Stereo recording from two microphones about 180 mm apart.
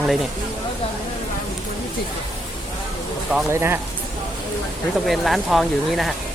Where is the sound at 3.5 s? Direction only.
15° right (ahead or behind).